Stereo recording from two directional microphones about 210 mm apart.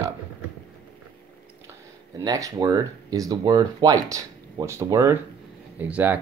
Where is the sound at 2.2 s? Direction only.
15° right (ahead or behind).